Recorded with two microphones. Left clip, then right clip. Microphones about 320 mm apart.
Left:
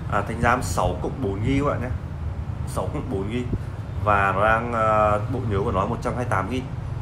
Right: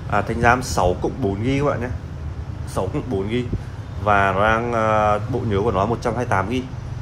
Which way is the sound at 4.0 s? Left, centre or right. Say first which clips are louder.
Right 3 dB; right.